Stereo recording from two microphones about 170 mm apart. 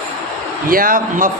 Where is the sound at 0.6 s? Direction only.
55° right (ahead or behind).